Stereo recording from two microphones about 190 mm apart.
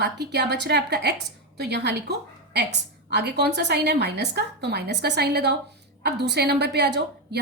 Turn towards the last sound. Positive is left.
turn(degrees=-60)  # may be behind; listen again after turning